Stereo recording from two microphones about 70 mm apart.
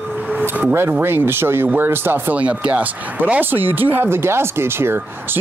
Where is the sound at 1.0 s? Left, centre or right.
Right.